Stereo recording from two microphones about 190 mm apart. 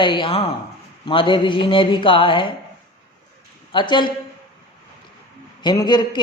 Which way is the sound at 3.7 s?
25° left (ahead or behind).